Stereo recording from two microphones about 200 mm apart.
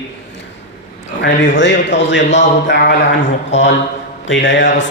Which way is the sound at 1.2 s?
65° left (ahead or behind).